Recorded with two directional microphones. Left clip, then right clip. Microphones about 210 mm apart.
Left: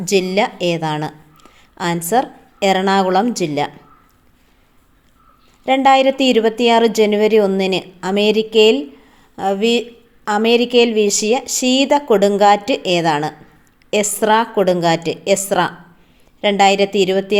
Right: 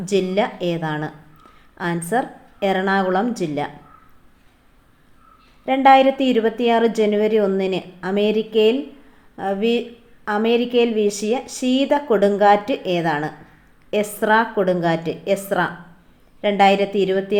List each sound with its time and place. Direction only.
0.0 s a woman's voice: 35° left (ahead or behind)
5.6 s a woman's voice: 35° left (ahead or behind)